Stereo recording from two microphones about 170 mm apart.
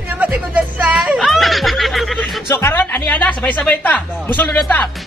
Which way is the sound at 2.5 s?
15° left (ahead or behind).